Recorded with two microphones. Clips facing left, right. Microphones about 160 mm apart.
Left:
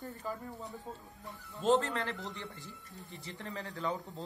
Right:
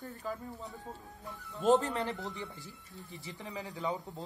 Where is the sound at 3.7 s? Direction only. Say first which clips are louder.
Right 1 dB; 15° right (ahead or behind).